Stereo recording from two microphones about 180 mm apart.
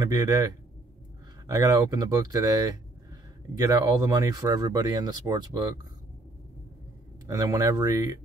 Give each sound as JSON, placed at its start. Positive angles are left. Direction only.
{"t": 0.0, "sound": "speech", "side_deg": -20}
{"t": 1.5, "sound": "speech", "side_deg": -20}
{"t": 7.2, "sound": "speech", "side_deg": -20}